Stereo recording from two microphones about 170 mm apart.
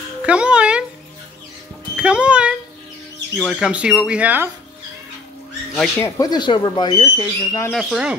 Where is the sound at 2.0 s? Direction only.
5° right (ahead or behind).